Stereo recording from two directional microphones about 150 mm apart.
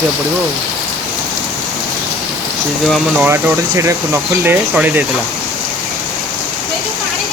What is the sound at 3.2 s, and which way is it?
Speech, 15° right (ahead or behind).